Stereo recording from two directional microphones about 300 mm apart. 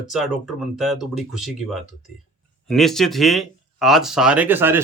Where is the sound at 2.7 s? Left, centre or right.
Centre.